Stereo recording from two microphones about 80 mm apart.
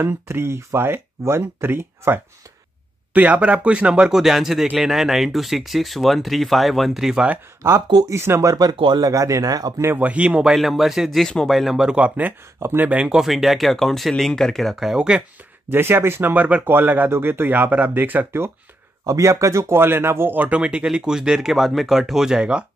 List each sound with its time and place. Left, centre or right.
0.0 s speech: right
3.1 s speech: centre
8.1 s speech: right
8.7 s speech: right
9.0 s speech: right
9.9 s speech: centre
12.5 s speech: right
12.8 s speech: centre
15.7 s speech: right
19.0 s speech: right; by 22.7 s centre